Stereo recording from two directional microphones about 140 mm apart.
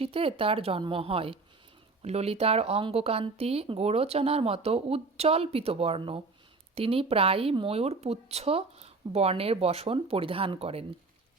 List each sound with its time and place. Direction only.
0.0 s a woman's voice: 40° right (ahead or behind)